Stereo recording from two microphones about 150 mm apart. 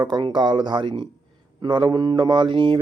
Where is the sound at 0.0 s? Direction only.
30° right (ahead or behind).